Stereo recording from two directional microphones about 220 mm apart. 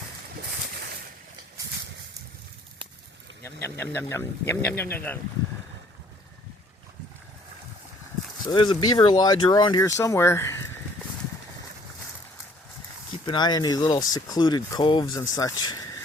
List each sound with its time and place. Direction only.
3.4 s speech: 10° left (ahead or behind)
8.4 s speech: 20° left (ahead or behind)
13.2 s speech: 20° left (ahead or behind)